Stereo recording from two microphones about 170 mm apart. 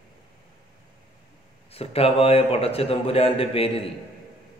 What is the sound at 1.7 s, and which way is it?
Speech, 35° left (ahead or behind).